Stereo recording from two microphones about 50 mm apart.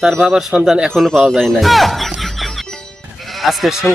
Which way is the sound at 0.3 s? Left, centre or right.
Centre.